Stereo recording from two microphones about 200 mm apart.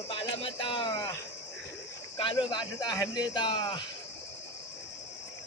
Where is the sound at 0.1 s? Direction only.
25° left (ahead or behind).